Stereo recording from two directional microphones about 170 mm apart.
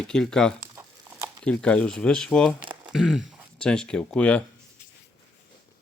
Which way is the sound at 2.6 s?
30° right (ahead or behind).